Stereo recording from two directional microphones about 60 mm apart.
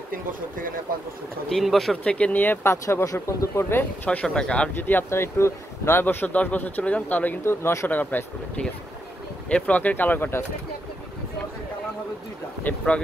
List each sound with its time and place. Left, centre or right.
1.5 s speech: centre
2.0 s speech: centre
2.3 s speech: left
2.6 s speech: left
3.7 s speech: left
4.7 s speech: left
6.2 s speech: left
7.4 s speech: left
7.9 s speech: left
9.5 s speech: left
12.7 s speech: left